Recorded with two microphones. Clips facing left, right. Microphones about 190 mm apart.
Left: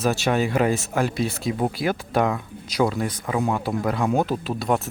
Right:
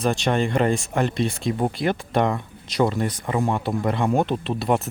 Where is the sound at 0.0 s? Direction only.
5° left (ahead or behind).